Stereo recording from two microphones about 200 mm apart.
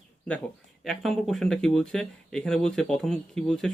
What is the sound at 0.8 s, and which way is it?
Speech, centre (ahead or behind).